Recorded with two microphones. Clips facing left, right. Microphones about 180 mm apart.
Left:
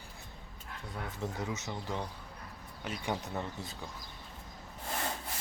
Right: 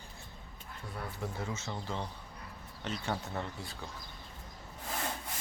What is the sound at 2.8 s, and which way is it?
Speech, 10° left (ahead or behind).